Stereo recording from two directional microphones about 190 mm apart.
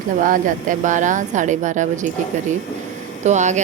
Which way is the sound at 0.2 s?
45° right (ahead or behind).